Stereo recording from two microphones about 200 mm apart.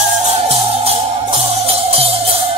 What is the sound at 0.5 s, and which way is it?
Music, 30° right (ahead or behind).